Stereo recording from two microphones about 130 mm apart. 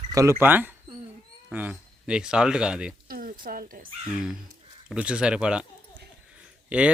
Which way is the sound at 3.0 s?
90° right.